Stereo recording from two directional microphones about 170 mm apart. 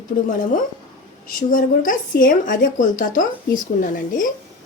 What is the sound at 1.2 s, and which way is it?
A woman's voice, 55° left (ahead or behind).